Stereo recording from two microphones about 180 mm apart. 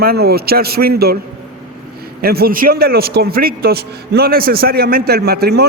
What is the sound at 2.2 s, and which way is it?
A man's voice, 60° right (ahead or behind).